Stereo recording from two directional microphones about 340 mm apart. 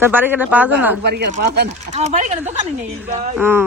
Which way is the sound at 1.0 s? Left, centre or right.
Right.